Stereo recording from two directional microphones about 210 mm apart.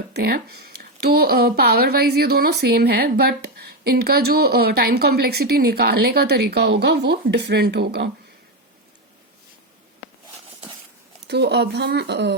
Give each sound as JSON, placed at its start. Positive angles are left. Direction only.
{"t": 0.1, "sound": "speech", "side_deg": -50}
{"t": 11.3, "sound": "speech", "side_deg": -55}